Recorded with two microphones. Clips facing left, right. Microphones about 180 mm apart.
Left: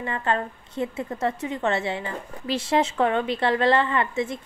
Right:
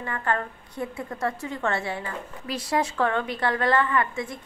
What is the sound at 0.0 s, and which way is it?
A woman's voice, 20° left (ahead or behind).